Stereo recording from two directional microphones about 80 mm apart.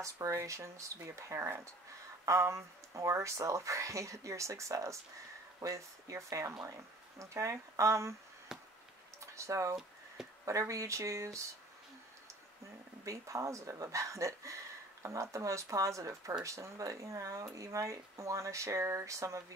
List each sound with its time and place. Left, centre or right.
0.0 s speech: right
8.5 s chop: centre
9.2 s speech: right
13.0 s speech: right